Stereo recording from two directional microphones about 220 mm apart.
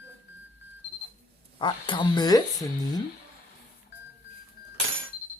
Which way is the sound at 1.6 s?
20° left (ahead or behind).